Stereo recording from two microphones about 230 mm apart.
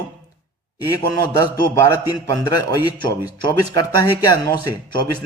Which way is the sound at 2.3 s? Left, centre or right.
Centre.